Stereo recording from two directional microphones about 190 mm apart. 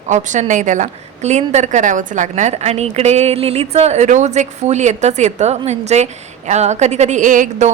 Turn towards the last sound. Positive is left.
turn(degrees=-40)  # may be behind; listen again after turning